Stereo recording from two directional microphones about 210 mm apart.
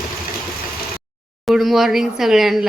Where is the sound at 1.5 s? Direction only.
Centre (ahead or behind).